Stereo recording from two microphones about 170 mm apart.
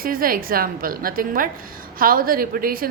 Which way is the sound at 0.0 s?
55° right (ahead or behind).